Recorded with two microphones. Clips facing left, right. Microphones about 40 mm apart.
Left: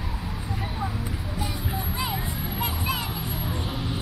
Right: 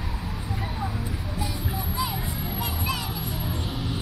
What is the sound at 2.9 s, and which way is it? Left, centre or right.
Children playing, centre.